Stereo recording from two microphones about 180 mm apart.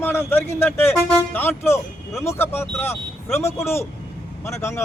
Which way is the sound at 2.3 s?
10° left (ahead or behind).